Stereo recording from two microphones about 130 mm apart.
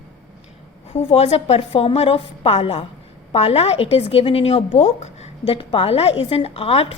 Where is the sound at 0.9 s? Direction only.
50° left (ahead or behind).